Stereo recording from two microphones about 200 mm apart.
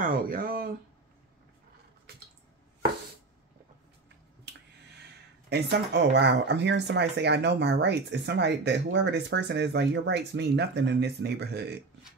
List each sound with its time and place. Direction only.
0.0 s speech: 45° right (ahead or behind)
5.5 s speech: 55° right (ahead or behind)